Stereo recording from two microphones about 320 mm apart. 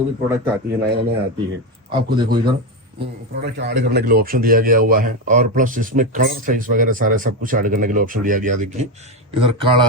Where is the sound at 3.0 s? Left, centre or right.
Right.